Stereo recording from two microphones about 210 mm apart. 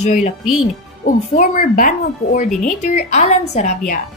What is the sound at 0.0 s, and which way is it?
A woman's voice, 35° left (ahead or behind).